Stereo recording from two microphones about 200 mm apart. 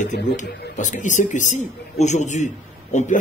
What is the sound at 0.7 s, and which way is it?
A man's voice, 40° left (ahead or behind).